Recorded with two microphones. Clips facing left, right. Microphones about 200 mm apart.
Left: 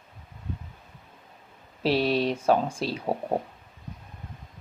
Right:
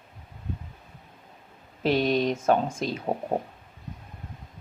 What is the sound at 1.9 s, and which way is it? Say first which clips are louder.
Speech: right 1 dB; 30° left (ahead or behind).